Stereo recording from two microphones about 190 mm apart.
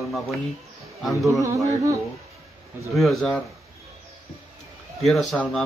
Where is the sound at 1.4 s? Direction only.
15° right (ahead or behind).